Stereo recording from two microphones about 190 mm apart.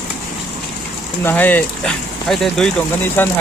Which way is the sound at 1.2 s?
10° left (ahead or behind).